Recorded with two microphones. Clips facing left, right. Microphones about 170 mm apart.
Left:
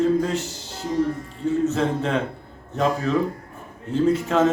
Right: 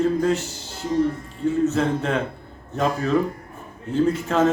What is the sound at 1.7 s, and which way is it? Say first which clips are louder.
Speech: right 1 dB; centre (ahead or behind).